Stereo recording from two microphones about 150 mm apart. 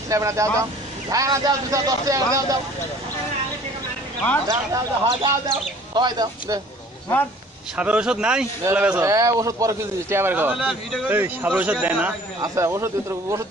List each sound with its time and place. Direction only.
0.1 s a man's voice: 20° right (ahead or behind)
4.7 s a man's voice: 20° right (ahead or behind)
7.7 s speech: 10° right (ahead or behind)
9.0 s speech: 20° right (ahead or behind)
12.4 s a man's voice: 20° right (ahead or behind)